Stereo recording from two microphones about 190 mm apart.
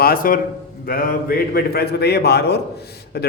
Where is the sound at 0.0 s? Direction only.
50° left (ahead or behind).